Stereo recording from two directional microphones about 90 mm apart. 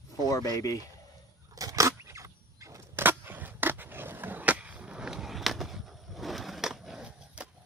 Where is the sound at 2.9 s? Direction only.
25° right (ahead or behind).